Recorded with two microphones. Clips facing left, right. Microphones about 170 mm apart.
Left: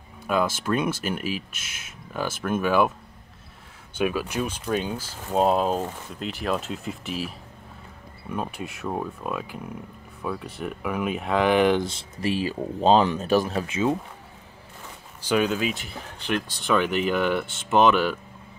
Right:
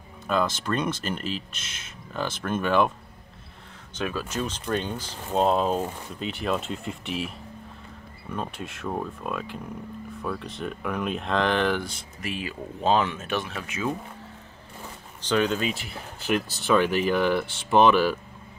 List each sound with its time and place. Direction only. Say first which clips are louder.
0.3 s speech: left 2 dB; 10° left (ahead or behind)
3.9 s speech: left 4 dB; 10° left (ahead or behind)
11.8 s speech: left 7 dB; 25° left (ahead or behind)
15.2 s speech: left 1 dB; 10° left (ahead or behind)